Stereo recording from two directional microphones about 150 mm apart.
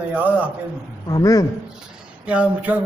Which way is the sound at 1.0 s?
25° left (ahead or behind).